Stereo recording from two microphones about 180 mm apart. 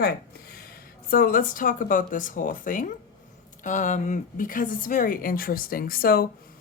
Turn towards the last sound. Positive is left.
turn(degrees=55)  # may be behind; listen again after turning